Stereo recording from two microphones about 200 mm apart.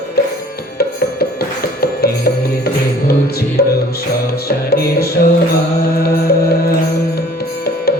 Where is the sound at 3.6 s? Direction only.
50° left (ahead or behind).